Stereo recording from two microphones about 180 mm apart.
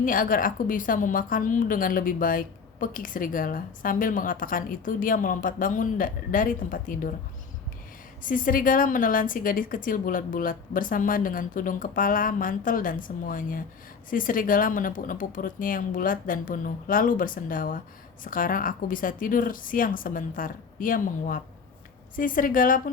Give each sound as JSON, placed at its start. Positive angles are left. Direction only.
{"t": 0.0, "sound": "a woman's voice", "side_deg": 50}
{"t": 8.2, "sound": "a woman's voice", "side_deg": 50}